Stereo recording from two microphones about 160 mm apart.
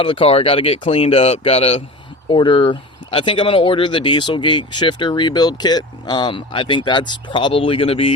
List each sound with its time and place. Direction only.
0.0 s speech: 35° left (ahead or behind)